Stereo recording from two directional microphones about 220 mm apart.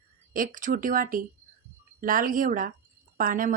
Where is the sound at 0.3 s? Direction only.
35° right (ahead or behind).